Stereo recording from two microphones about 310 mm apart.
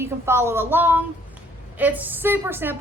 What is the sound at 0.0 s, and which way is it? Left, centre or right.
A woman's voice, centre.